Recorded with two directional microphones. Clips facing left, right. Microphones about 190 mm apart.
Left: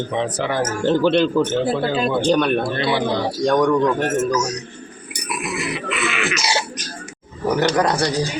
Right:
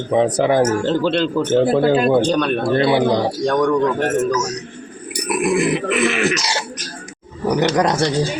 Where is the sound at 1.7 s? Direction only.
55° right (ahead or behind).